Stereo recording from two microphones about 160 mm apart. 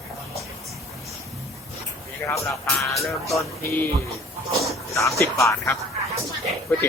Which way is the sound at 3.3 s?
15° left (ahead or behind).